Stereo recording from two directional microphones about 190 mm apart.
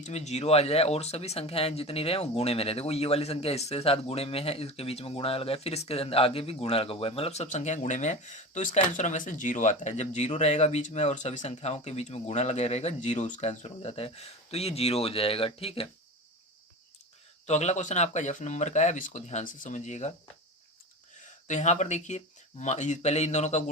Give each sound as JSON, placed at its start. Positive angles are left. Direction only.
{"t": 0.0, "sound": "speech", "side_deg": 35}
{"t": 17.4, "sound": "speech", "side_deg": 35}
{"t": 21.4, "sound": "speech", "side_deg": 40}